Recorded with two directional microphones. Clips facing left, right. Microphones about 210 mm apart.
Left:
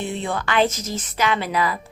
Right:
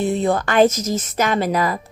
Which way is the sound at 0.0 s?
40° right (ahead or behind).